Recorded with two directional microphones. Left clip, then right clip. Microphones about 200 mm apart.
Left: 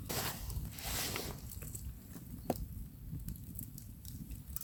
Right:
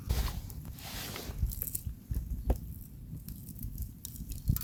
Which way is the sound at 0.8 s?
40° left (ahead or behind).